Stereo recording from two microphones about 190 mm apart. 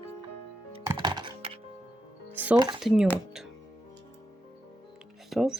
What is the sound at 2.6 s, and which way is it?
Speech, 25° right (ahead or behind).